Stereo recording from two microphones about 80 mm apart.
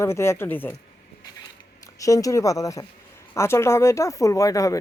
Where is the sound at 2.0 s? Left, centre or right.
Left.